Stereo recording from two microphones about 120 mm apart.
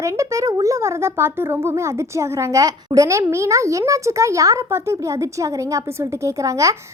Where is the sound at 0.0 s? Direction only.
25° right (ahead or behind).